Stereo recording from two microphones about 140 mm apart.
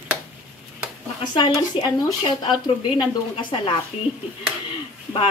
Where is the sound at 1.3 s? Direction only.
35° left (ahead or behind).